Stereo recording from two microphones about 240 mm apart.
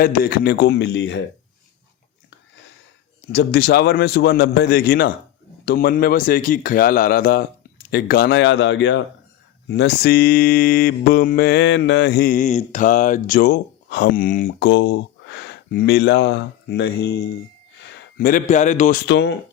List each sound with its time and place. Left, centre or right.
0.0 s mantra: left
3.3 s mantra: left
7.9 s speech: left
9.6 s mantra: left
14.7 s speech: left
18.2 s mantra: left
19.0 s speech: left